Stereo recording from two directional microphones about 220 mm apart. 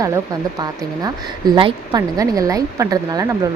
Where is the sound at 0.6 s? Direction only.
20° right (ahead or behind).